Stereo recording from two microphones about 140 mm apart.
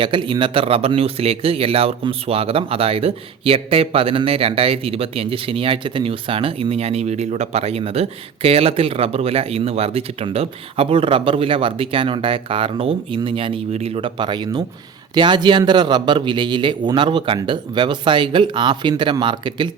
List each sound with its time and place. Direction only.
0.0 s a man's voice: 35° right (ahead or behind)